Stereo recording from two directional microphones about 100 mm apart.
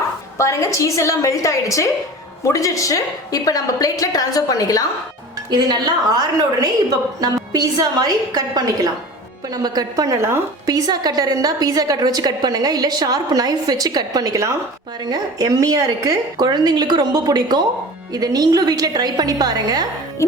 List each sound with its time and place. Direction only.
0.3 s a woman's voice: 30° left (ahead or behind)
5.5 s a woman's voice: 45° right (ahead or behind)